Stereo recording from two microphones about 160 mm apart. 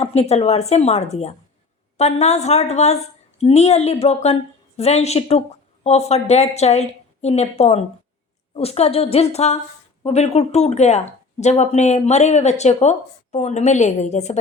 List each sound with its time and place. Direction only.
0.0 s a woman's voice: 40° left (ahead or behind)